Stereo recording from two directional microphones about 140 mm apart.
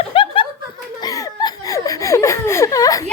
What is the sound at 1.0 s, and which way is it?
Laughter, 25° left (ahead or behind).